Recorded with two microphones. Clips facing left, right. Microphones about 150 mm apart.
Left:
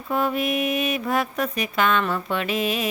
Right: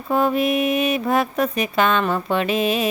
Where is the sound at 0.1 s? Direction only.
30° right (ahead or behind).